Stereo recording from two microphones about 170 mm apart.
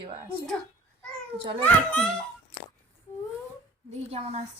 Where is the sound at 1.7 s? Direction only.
5° left (ahead or behind).